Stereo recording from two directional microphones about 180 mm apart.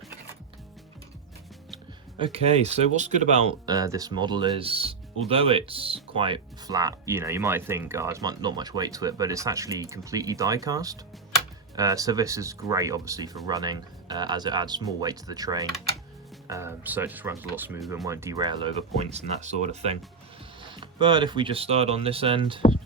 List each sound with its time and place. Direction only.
2.1 s speech: 30° right (ahead or behind)
3.7 s speech: 20° right (ahead or behind)
18.9 s speech: 40° right (ahead or behind)